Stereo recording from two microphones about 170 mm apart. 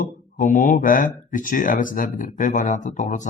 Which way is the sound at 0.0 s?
50° left (ahead or behind).